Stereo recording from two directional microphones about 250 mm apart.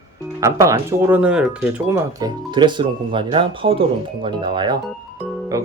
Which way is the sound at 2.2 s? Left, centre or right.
Centre.